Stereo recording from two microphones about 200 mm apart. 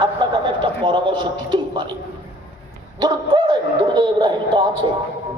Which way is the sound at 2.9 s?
20° right (ahead or behind).